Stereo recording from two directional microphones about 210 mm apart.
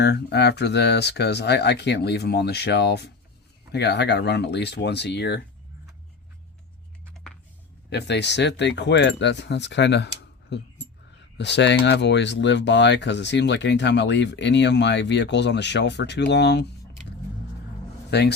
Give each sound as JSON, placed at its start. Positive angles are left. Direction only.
{"t": 0.0, "sound": "speech", "side_deg": 55}
{"t": 7.9, "sound": "speech", "side_deg": 55}
{"t": 18.1, "sound": "speech", "side_deg": 50}